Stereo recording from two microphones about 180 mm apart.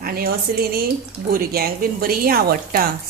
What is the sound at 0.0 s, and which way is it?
A woman's voice, 55° right (ahead or behind).